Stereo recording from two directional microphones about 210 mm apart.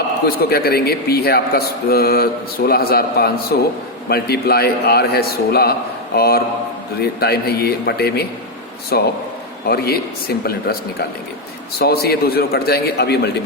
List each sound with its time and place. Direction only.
0.3 s a man's voice: 45° left (ahead or behind)
11.8 s a man's voice: 50° left (ahead or behind)